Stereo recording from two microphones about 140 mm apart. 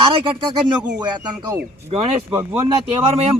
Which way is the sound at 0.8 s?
5° right (ahead or behind).